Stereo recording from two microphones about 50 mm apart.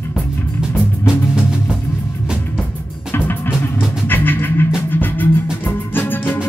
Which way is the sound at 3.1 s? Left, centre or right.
Left.